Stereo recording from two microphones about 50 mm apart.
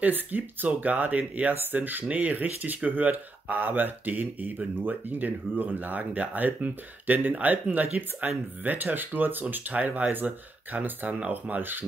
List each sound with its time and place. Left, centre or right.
0.0 s speech: right
1.5 s speech: right